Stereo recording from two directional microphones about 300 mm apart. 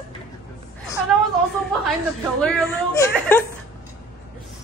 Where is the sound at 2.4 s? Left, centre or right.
Centre.